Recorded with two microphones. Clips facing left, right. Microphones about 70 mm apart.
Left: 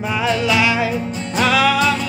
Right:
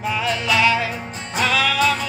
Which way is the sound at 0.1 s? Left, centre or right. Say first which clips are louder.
Left 4 dB; centre.